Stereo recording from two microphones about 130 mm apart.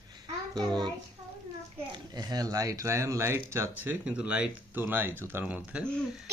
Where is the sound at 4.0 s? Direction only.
10° right (ahead or behind).